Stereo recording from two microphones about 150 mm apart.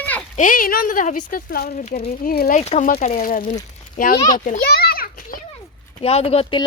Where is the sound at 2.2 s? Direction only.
90° left.